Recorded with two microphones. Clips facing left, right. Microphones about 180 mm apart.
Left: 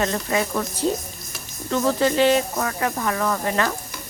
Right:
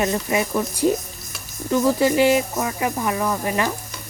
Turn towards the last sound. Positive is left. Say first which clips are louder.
# even
turn(degrees=-15)  # may be behind; listen again after turning